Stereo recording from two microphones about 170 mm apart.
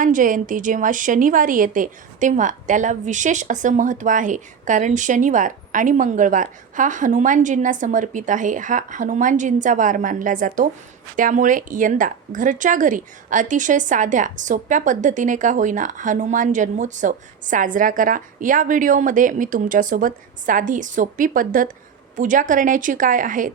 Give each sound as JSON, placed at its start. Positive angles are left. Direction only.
{"t": 0.0, "sound": "a woman's voice", "side_deg": -50}